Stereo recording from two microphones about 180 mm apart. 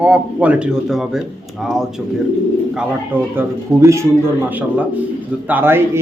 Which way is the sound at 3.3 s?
15° right (ahead or behind).